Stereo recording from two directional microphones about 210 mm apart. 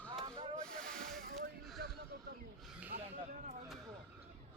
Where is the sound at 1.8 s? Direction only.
45° right (ahead or behind).